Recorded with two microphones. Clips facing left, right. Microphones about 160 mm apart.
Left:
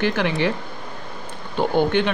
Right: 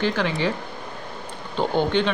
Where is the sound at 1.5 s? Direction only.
15° left (ahead or behind).